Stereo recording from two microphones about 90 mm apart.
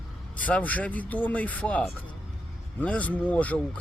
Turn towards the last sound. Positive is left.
turn(degrees=15)  # may be behind; listen again after turning